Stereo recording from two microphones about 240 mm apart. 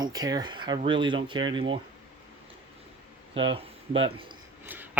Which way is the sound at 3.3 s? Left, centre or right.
Right.